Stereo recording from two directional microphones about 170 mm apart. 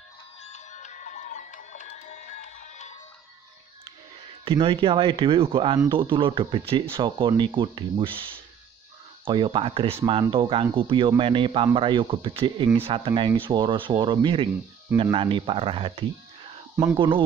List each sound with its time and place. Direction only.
0.5 s music: 45° left (ahead or behind)
4.5 s speech: 30° right (ahead or behind)
9.2 s speech: 30° right (ahead or behind)